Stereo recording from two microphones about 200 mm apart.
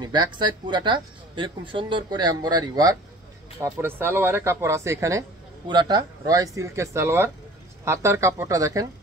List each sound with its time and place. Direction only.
0.0 s speech: 20° right (ahead or behind)